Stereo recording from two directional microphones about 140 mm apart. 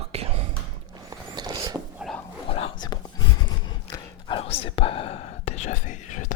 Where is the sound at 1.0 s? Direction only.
30° right (ahead or behind).